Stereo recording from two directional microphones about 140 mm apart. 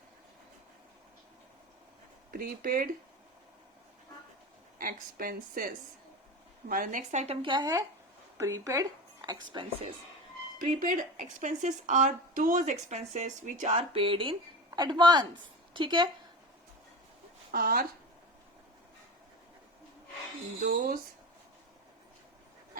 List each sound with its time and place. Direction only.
2.3 s speech: 90° right
4.8 s speech: 90° right
6.7 s a woman's voice: 75° right (ahead or behind); by 7.3 s 55° right (ahead or behind)
7.4 s a man's voice: 30° right (ahead or behind)
10.6 s a woman's voice: 80° right
12.9 s speech: 55° right (ahead or behind); by 14.3 s 40° right (ahead or behind)
14.7 s a man's voice: 30° right (ahead or behind)
17.5 s speech: 90° right
20.7 s speech: 90° right